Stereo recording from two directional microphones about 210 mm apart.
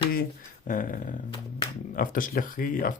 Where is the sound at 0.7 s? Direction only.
40° left (ahead or behind).